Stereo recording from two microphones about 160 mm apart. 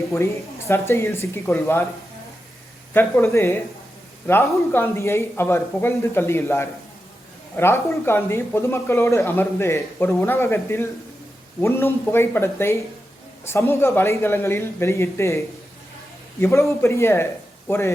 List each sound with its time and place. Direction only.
0.7 s speech: 15° left (ahead or behind)
2.9 s speech: 15° left (ahead or behind)
16.4 s speech: 15° left (ahead or behind)